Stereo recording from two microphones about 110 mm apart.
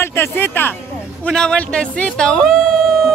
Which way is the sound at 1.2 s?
5° left (ahead or behind).